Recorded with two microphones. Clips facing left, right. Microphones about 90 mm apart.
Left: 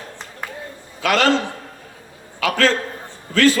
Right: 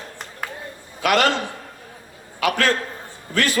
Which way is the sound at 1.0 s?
15° right (ahead or behind).